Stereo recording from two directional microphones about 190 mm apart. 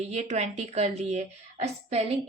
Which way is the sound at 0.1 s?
35° right (ahead or behind).